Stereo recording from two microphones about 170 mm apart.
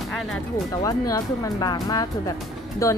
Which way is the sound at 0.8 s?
20° left (ahead or behind).